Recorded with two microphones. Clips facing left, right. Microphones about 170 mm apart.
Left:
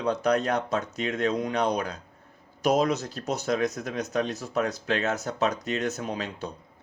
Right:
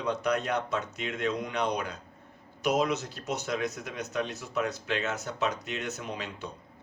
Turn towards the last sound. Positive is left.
turn(degrees=40)  # may be behind; listen again after turning